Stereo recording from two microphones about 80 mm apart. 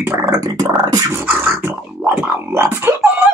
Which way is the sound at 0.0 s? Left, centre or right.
Right.